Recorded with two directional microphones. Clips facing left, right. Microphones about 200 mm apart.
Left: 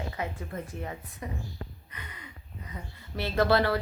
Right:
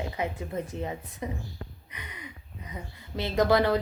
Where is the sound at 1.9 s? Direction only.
15° right (ahead or behind).